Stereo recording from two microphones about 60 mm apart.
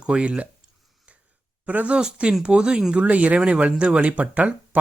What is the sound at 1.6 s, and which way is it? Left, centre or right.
Speech, right.